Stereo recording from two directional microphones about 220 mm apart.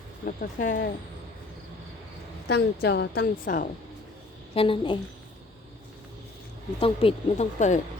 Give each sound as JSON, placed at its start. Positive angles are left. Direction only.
{"t": 0.3, "sound": "speech", "side_deg": 35}
{"t": 2.5, "sound": "a woman's voice", "side_deg": 50}
{"t": 4.5, "sound": "speech", "side_deg": 25}
{"t": 6.7, "sound": "speech", "side_deg": 25}